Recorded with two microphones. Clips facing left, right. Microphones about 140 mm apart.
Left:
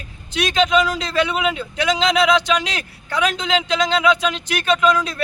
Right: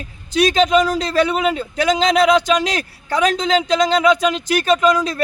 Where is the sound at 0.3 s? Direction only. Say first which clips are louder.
Right 3 dB; 40° right (ahead or behind).